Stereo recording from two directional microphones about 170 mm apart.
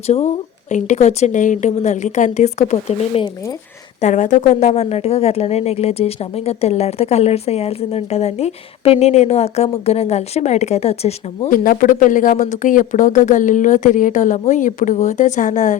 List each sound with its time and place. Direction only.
0.1 s a woman's voice: 40° left (ahead or behind)
11.4 s speech: 55° left (ahead or behind)